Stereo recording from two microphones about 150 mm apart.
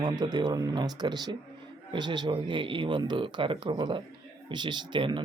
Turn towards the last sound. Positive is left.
turn(degrees=-35)  # may be behind; listen again after turning